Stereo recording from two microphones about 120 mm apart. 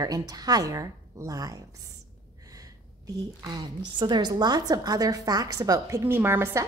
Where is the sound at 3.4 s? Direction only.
40° right (ahead or behind).